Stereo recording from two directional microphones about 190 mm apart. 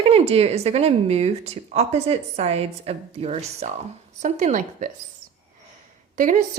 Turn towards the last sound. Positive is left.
turn(degrees=-45)  # may be behind; listen again after turning